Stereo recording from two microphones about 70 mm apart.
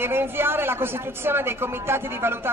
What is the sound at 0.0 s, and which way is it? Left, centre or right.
A man's voice, right.